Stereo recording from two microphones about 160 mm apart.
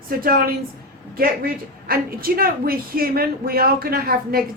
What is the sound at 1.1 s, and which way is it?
A woman's voice, 65° right (ahead or behind).